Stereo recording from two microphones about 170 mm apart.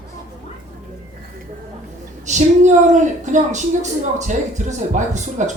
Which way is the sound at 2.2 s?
45° right (ahead or behind).